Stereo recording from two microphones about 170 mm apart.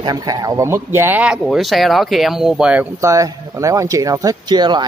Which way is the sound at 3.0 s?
20° right (ahead or behind).